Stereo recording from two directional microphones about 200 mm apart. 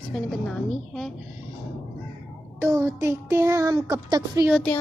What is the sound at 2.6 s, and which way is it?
Speech, 15° right (ahead or behind).